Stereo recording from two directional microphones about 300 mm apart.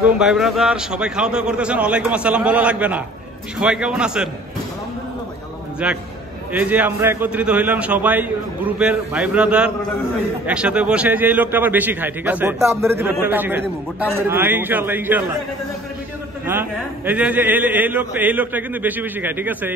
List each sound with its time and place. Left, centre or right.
0.2 s a man's voice: centre
5.8 s a man's voice: centre
16.4 s a man's voice: centre